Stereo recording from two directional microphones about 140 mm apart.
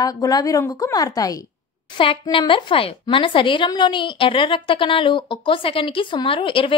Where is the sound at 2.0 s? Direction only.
35° left (ahead or behind).